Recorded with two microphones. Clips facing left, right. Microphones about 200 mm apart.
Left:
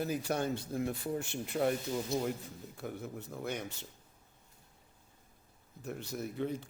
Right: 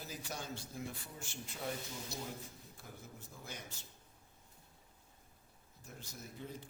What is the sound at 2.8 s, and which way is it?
Speech, 65° left (ahead or behind).